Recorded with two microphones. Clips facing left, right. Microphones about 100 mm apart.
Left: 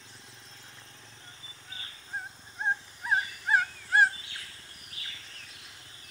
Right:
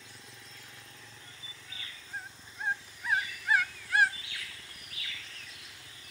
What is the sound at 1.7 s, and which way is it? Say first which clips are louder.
Dog: left 4 dB; 35° left (ahead or behind).